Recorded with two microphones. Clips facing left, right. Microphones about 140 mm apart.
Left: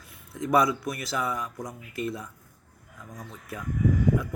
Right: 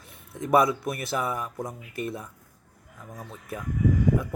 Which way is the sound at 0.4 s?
25° right (ahead or behind).